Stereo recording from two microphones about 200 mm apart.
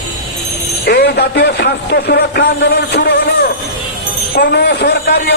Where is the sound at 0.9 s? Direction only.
55° left (ahead or behind).